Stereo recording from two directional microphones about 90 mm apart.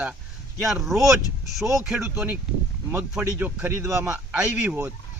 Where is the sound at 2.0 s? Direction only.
15° right (ahead or behind).